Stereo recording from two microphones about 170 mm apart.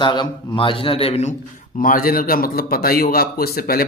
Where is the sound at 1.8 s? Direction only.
55° left (ahead or behind).